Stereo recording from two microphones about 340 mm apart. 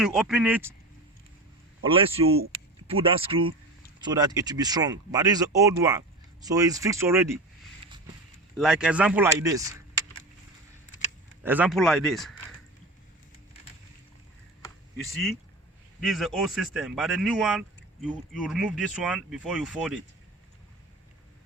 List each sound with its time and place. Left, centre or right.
0.0 s speech: centre
1.8 s speech: centre
7.8 s vehicle: centre
8.5 s speech: centre
11.4 s speech: centre
14.6 s a sound: centre
16.0 s speech: centre